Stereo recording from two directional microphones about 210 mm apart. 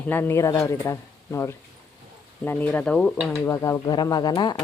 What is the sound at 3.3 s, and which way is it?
A woman's voice, 15° left (ahead or behind).